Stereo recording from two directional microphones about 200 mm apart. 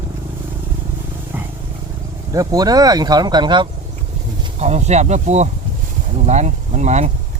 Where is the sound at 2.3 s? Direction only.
20° right (ahead or behind).